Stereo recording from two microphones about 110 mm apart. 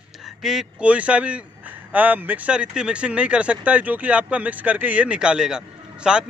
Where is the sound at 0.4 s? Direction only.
5° right (ahead or behind).